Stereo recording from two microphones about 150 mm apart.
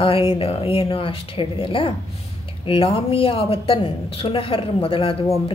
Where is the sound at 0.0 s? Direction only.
35° left (ahead or behind).